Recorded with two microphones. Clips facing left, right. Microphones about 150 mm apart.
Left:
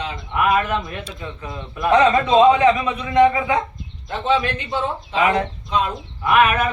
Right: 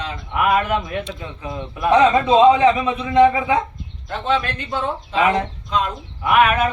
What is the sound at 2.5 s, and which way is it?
Speech, 25° right (ahead or behind).